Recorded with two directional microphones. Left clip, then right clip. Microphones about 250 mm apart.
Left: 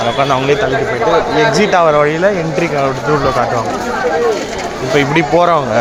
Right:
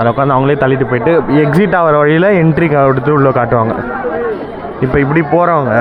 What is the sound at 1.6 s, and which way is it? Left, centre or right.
Speech, centre.